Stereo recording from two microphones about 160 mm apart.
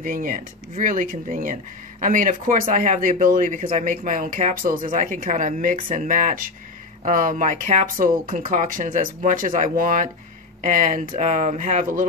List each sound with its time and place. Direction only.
0.0 s speech: 60° right (ahead or behind)